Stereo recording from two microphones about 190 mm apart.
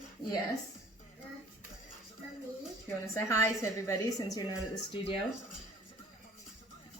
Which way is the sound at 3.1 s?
15° left (ahead or behind).